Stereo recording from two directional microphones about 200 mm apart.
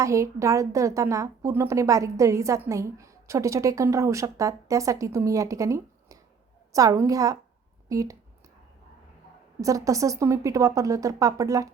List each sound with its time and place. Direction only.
0.0 s a woman's voice: 15° right (ahead or behind)
9.6 s a woman's voice: 15° right (ahead or behind)